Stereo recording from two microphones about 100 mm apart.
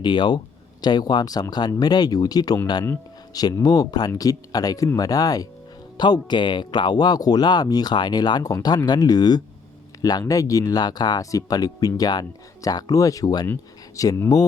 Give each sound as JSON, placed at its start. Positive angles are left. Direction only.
{"t": 0.0, "sound": "speech", "side_deg": 50}